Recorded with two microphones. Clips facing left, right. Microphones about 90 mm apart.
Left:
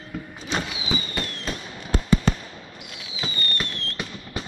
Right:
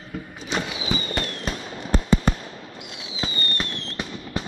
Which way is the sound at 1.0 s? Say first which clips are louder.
Right 3 dB; 30° right (ahead or behind).